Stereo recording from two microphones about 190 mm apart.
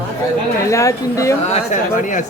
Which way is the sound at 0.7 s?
15° left (ahead or behind).